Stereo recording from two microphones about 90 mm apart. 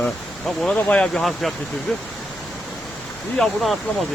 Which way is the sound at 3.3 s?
5° left (ahead or behind).